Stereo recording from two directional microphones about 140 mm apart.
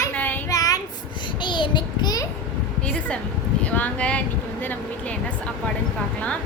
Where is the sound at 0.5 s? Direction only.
25° left (ahead or behind).